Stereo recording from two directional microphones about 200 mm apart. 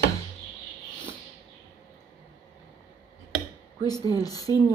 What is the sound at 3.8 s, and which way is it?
Speech, 20° left (ahead or behind).